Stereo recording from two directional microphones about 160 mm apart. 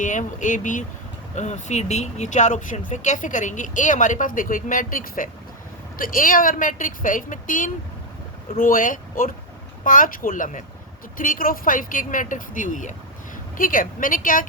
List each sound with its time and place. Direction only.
0.0 s speech: 50° left (ahead or behind)